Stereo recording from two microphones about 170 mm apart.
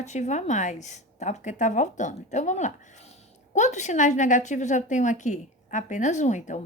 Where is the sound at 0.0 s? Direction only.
40° left (ahead or behind).